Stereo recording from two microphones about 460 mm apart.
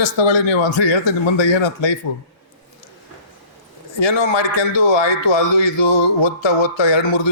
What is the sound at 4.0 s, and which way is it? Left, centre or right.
A man's voice, left.